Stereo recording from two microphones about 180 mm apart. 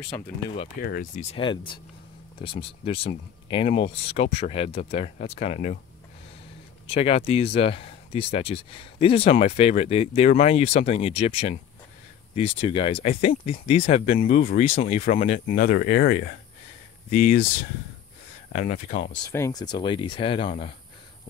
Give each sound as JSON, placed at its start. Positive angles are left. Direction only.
{"t": 0.1, "sound": "speech", "side_deg": 15}
{"t": 0.7, "sound": "speech", "side_deg": 55}
{"t": 1.3, "sound": "speech", "side_deg": 25}
{"t": 6.9, "sound": "speech", "side_deg": 35}
{"t": 14.2, "sound": "speech", "side_deg": 50}
{"t": 18.5, "sound": "speech", "side_deg": 50}
{"t": 19.2, "sound": "speech", "side_deg": 20}